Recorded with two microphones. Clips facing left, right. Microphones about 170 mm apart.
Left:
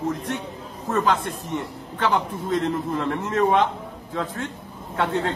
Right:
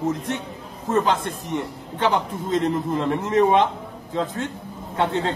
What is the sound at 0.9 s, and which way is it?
A man's voice, 20° right (ahead or behind).